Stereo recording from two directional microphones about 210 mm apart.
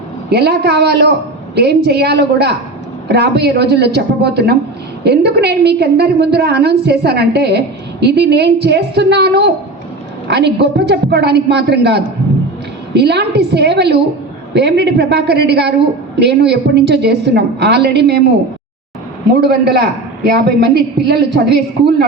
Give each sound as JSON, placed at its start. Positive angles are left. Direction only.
{"t": 0.3, "sound": "a woman's voice", "side_deg": -50}
{"t": 19.3, "sound": "a woman's voice", "side_deg": -50}